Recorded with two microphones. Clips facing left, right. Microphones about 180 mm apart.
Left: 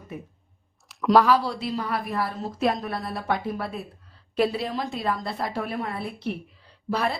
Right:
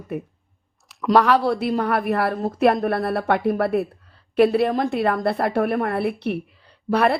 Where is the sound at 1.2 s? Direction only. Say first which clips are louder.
Right 4 dB; 60° right (ahead or behind).